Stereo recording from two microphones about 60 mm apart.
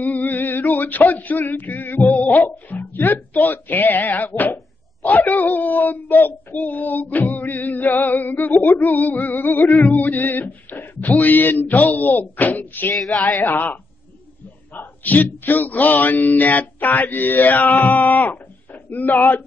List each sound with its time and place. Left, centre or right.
0.0 s speech: left
7.8 s music: left
12.9 s speech: centre
13.4 s music: left
14.7 s speech: left